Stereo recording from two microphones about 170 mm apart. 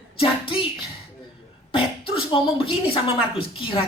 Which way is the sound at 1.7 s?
30° left (ahead or behind).